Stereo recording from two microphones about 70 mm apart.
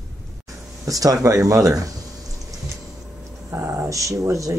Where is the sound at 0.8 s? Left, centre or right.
Right.